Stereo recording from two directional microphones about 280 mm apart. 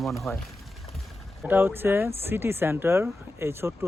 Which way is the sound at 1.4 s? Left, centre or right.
Centre.